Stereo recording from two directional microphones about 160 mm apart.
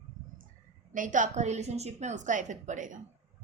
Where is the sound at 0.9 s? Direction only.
55° right (ahead or behind).